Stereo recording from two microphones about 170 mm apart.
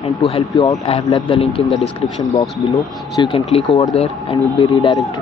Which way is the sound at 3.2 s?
30° left (ahead or behind).